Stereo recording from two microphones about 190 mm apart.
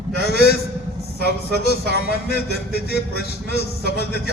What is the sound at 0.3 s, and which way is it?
A man's voice, 55° left (ahead or behind).